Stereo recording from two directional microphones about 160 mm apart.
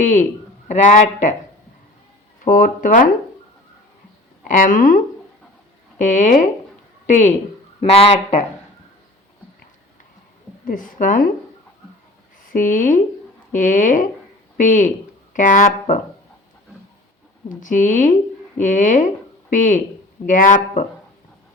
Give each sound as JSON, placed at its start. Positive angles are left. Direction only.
{"t": 0.0, "sound": "speech", "side_deg": 50}
{"t": 2.4, "sound": "speech", "side_deg": 60}
{"t": 4.4, "sound": "speech", "side_deg": 60}
{"t": 10.7, "sound": "speech", "side_deg": 55}
{"t": 12.5, "sound": "speech", "side_deg": 55}
{"t": 17.5, "sound": "speech", "side_deg": 55}